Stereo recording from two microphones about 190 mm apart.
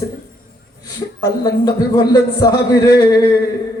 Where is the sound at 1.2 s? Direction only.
20° left (ahead or behind).